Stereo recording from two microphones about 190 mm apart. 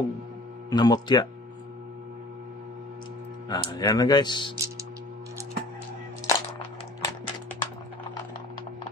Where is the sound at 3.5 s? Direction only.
20° left (ahead or behind).